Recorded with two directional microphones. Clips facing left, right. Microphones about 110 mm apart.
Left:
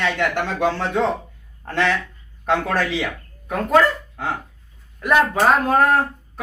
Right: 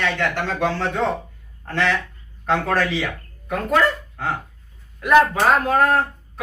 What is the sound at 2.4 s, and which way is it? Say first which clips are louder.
Speech: even; 20° left (ahead or behind).